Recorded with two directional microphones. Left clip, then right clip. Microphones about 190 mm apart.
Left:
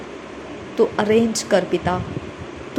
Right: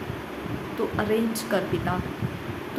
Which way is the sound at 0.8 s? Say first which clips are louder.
Left 9 dB; 30° left (ahead or behind).